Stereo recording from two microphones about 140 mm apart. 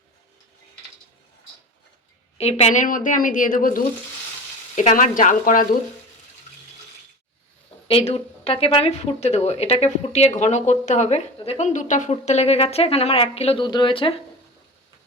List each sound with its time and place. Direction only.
2.4 s a woman's voice: 50° left (ahead or behind); by 3.8 s 80° left
4.7 s a woman's voice: 60° left (ahead or behind)
7.9 s speech: 45° left (ahead or behind)
13.7 s speech: 35° left (ahead or behind)